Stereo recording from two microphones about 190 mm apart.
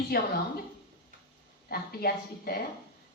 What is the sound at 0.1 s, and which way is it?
Speech, 55° left (ahead or behind).